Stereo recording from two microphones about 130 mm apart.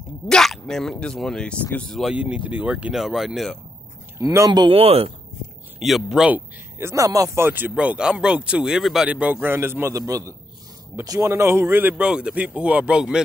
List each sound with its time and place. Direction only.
0.3 s speech: 5° left (ahead or behind)
2.1 s speech: 10° right (ahead or behind)
4.2 s speech: 25° right (ahead or behind)
4.5 s speech: 40° right (ahead or behind)
5.8 s speech: centre (ahead or behind)
6.8 s speech: 25° right (ahead or behind); by 13.2 s 5° right (ahead or behind)